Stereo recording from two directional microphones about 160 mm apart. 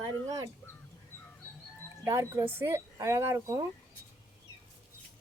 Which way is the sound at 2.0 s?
15° right (ahead or behind).